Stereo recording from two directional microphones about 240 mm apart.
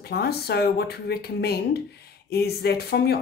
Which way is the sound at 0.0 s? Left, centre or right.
Left.